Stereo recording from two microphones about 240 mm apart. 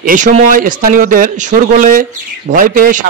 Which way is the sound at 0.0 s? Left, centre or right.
Right.